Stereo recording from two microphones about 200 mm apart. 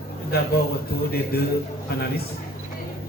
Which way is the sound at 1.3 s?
50° left (ahead or behind).